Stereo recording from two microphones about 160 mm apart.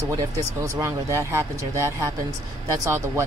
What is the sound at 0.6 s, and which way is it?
Speech, 20° right (ahead or behind).